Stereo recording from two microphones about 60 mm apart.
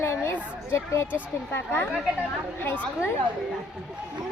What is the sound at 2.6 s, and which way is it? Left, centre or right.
Speech, left.